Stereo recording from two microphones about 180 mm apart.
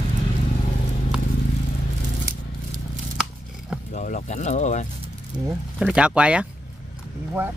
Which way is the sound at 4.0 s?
45° left (ahead or behind).